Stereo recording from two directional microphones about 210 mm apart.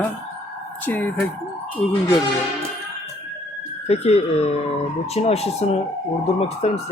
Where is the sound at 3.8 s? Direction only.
30° left (ahead or behind).